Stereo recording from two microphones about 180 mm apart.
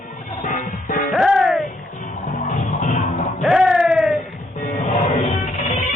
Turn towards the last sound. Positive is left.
turn(degrees=40)  # may be behind; listen again after turning